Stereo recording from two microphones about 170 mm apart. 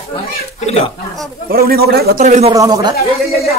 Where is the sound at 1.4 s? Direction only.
60° right (ahead or behind).